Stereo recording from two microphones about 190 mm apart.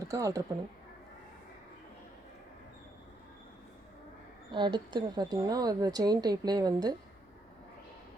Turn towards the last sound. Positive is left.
turn(degrees=-20)  # may be behind; listen again after turning